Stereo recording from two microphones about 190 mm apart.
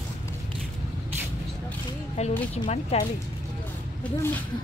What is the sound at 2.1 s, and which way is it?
Speech, 35° left (ahead or behind).